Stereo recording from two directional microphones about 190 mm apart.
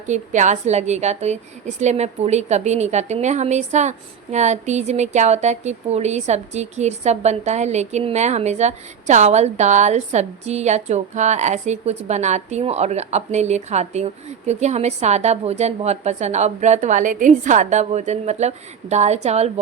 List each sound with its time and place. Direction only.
0.1 s a woman's voice: 40° right (ahead or behind)